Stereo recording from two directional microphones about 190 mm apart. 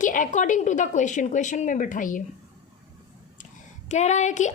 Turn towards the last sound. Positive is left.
turn(degrees=40)  # may be behind; listen again after turning